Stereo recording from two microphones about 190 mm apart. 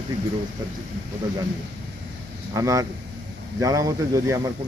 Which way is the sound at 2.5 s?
20° right (ahead or behind).